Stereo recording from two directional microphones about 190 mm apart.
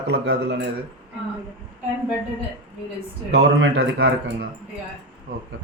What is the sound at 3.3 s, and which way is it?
Speech, 55° right (ahead or behind).